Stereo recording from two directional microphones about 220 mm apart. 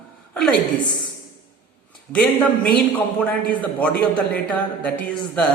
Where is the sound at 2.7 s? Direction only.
5° left (ahead or behind).